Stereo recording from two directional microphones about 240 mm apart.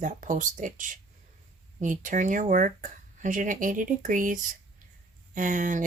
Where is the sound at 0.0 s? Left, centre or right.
Right.